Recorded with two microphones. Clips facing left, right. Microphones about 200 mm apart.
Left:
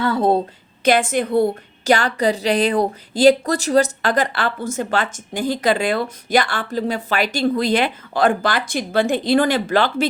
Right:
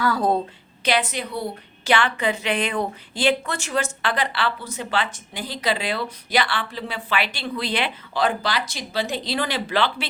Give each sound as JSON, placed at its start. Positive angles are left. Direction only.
{"t": 0.0, "sound": "a woman's voice", "side_deg": 25}
{"t": 0.9, "sound": "a woman's voice", "side_deg": 50}